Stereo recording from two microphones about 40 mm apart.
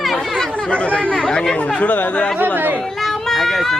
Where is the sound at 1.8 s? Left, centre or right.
Left.